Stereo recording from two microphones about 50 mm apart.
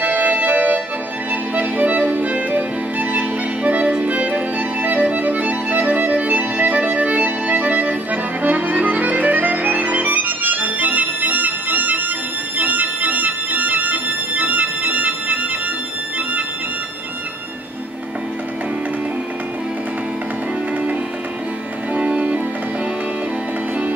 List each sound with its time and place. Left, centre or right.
0.0 s music: right
21.9 s music: right